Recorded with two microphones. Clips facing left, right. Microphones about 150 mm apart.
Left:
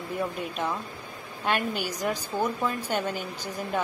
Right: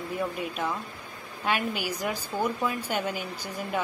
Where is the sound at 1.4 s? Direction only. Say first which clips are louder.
Left 1 dB; 5° right (ahead or behind).